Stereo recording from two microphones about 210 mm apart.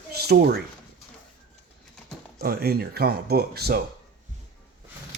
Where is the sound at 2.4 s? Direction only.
50° right (ahead or behind).